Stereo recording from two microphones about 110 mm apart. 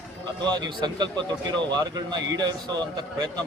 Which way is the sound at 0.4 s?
40° right (ahead or behind).